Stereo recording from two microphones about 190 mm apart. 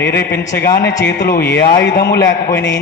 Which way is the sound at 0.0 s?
60° left (ahead or behind).